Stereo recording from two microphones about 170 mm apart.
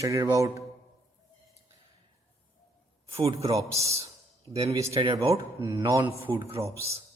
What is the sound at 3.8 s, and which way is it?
Speech, 35° right (ahead or behind).